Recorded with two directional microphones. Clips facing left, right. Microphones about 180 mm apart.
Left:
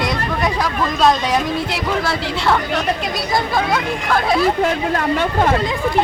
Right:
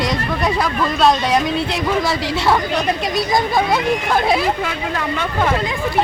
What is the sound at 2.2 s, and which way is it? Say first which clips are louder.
Speech: right 1 dB; 5° right (ahead or behind).